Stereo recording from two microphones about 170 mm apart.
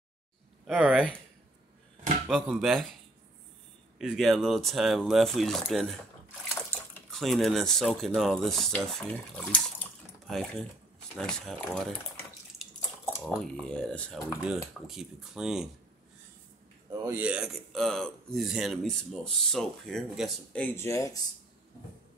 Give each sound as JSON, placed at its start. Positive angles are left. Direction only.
{"t": 0.7, "sound": "speech", "side_deg": -10}
{"t": 2.2, "sound": "a man's voice", "side_deg": 0}
{"t": 4.0, "sound": "a man's voice", "side_deg": 0}
{"t": 6.7, "sound": "dishes", "side_deg": 10}
{"t": 7.1, "sound": "a man's voice", "side_deg": 0}
{"t": 9.5, "sound": "bathtub", "side_deg": 5}
{"t": 11.1, "sound": "a man's voice", "side_deg": 0}
{"t": 13.2, "sound": "a man's voice", "side_deg": 0}
{"t": 17.0, "sound": "a man's voice", "side_deg": -10}